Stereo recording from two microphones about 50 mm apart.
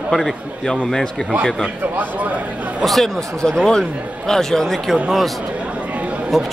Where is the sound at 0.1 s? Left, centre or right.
Centre.